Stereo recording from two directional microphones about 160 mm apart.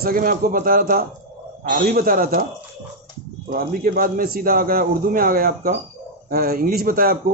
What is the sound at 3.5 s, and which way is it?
A man's voice, 65° right (ahead or behind).